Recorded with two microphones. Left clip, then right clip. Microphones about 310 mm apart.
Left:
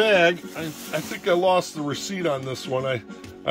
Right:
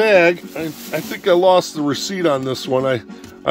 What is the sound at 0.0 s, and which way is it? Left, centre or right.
A man's voice, centre.